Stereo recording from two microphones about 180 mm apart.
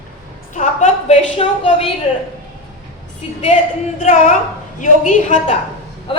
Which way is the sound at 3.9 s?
45° left (ahead or behind).